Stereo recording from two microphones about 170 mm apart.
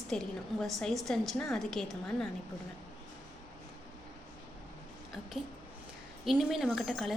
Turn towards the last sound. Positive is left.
turn(degrees=0)  # may be behind; listen again after turning